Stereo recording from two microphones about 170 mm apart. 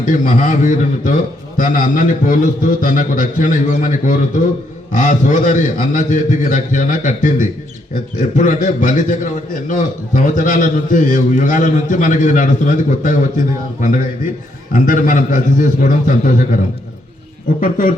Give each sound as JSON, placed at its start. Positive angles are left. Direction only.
{"t": 0.0, "sound": "a man's voice", "side_deg": 50}
{"t": 14.7, "sound": "a man's voice", "side_deg": 50}
{"t": 17.6, "sound": "a man's voice", "side_deg": 55}